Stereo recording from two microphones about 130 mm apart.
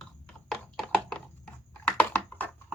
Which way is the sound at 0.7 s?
5° left (ahead or behind).